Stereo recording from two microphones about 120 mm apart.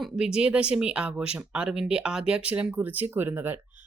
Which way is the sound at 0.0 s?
5° right (ahead or behind).